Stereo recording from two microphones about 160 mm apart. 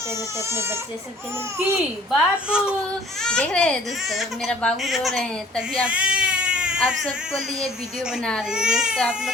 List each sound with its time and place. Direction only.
0.4 s speech: 15° right (ahead or behind)
2.0 s speech: 5° right (ahead or behind)
5.8 s speech: 5° right (ahead or behind)